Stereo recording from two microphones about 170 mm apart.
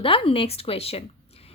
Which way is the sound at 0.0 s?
30° left (ahead or behind).